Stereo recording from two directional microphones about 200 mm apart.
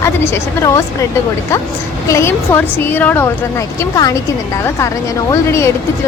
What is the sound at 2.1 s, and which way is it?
A woman's voice, 15° left (ahead or behind).